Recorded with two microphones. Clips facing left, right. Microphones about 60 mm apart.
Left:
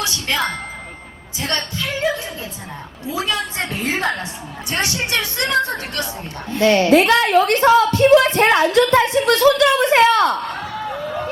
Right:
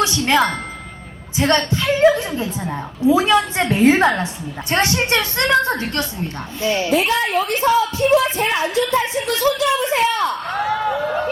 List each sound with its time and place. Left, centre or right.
0.0 s music: right
1.4 s a woman's voice: right
6.6 s speech: left
10.6 s a sound: right